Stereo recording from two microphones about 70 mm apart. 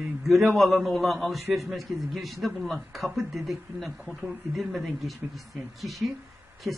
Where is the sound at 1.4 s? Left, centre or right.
Right.